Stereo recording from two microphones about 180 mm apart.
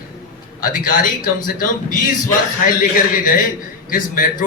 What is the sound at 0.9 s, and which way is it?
A man's voice, 50° left (ahead or behind).